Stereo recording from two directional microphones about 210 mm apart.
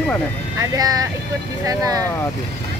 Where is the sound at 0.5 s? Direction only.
15° right (ahead or behind).